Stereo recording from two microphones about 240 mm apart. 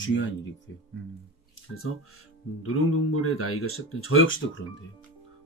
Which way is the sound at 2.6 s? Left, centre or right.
Left.